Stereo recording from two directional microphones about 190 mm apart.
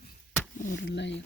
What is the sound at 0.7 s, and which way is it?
Speech, 65° left (ahead or behind).